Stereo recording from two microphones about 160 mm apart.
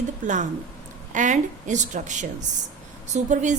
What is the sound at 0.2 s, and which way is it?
A woman's voice, 50° right (ahead or behind).